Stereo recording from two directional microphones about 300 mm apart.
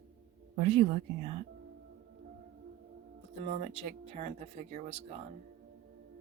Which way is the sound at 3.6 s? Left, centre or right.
Right.